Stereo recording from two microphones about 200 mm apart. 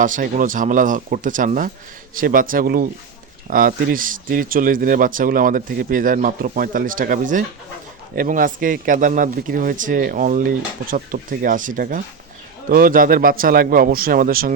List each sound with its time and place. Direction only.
0.0 s a man's voice: 40° right (ahead or behind)